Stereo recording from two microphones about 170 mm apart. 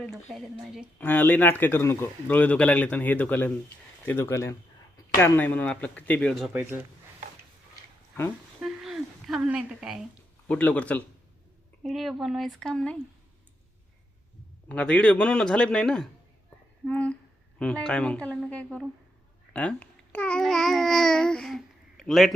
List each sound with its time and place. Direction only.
0.0 s speech: centre (ahead or behind)
0.9 s a man's voice: 10° left (ahead or behind)
6.5 s speech: 10° right (ahead or behind)
8.6 s a sound: centre (ahead or behind)
10.5 s a man's voice: 10° left (ahead or behind)
14.7 s a man's voice: 5° left (ahead or behind)